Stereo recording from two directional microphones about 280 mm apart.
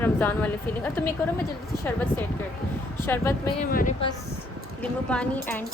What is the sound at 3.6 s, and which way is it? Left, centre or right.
Speech, left.